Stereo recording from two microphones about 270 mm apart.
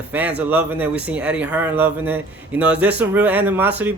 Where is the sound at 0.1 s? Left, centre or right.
Centre.